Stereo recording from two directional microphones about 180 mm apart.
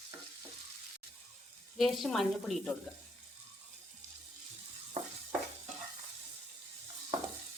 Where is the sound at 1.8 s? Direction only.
Centre (ahead or behind).